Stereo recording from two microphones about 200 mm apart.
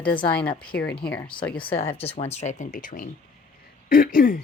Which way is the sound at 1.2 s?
25° left (ahead or behind).